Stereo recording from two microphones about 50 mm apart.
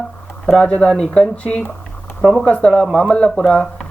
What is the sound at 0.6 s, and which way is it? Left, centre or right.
Speech, centre.